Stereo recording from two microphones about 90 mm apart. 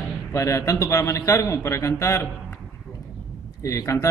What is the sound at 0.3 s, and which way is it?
Speech, 35° left (ahead or behind).